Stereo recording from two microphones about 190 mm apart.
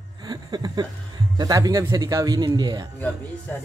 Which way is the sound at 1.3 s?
20° right (ahead or behind).